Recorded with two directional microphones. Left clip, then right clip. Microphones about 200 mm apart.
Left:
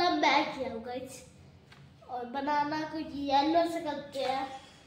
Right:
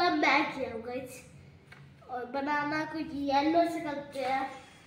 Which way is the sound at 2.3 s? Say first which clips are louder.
Left 1 dB; 10° right (ahead or behind).